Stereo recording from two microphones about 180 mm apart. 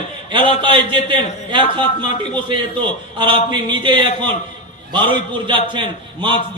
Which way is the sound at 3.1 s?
25° right (ahead or behind).